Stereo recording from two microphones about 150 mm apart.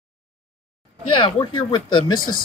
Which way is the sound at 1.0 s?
35° left (ahead or behind).